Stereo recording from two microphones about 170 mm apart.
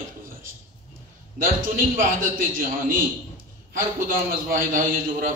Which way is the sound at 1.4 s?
50° right (ahead or behind).